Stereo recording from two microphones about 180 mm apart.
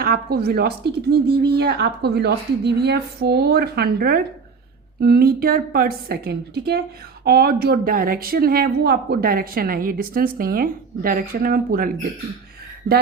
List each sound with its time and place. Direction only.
0.0 s a woman's voice: 60° right (ahead or behind)